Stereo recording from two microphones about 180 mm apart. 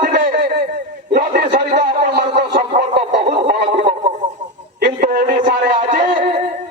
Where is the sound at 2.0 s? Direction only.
65° right (ahead or behind).